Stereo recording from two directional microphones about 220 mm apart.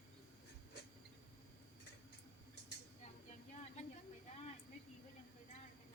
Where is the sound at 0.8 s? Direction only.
50° left (ahead or behind).